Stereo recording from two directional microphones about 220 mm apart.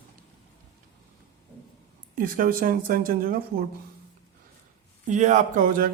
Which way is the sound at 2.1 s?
40° right (ahead or behind).